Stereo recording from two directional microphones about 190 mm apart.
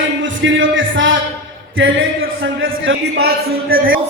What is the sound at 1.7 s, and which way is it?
A man's voice, 90° right.